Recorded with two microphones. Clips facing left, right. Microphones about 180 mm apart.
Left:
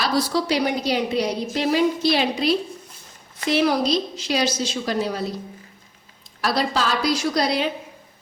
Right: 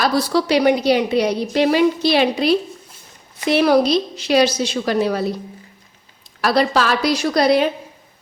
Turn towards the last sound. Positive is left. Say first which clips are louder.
# right 6 dB
turn(degrees=-55)  # may be behind; listen again after turning